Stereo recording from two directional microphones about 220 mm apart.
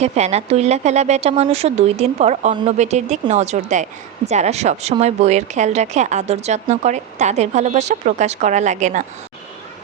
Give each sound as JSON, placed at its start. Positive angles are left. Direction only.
{"t": 0.0, "sound": "a woman's voice", "side_deg": -30}